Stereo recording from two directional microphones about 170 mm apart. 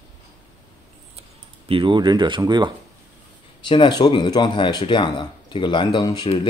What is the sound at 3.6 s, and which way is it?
Speech, 30° left (ahead or behind).